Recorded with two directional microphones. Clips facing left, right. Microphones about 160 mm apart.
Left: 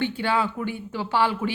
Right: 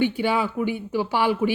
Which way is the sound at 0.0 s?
10° right (ahead or behind).